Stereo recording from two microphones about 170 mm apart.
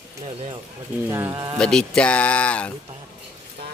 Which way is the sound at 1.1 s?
20° right (ahead or behind).